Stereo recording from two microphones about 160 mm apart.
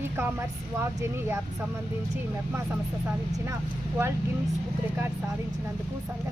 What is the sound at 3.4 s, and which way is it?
Speech, 15° right (ahead or behind).